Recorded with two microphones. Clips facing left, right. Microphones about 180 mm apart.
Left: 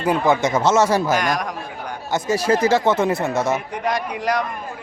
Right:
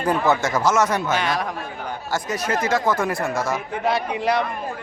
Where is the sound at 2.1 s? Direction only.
30° left (ahead or behind).